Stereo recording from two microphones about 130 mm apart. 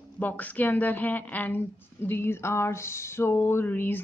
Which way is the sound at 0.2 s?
15° left (ahead or behind).